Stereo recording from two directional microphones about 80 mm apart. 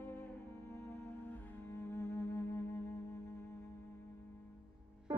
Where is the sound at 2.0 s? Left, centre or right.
Left.